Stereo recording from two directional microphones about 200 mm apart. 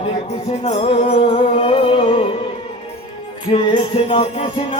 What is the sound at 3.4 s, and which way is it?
Music, 25° left (ahead or behind).